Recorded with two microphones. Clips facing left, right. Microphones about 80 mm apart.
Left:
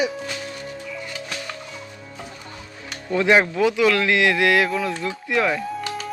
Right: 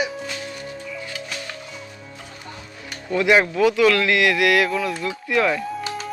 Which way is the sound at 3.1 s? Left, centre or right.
Left.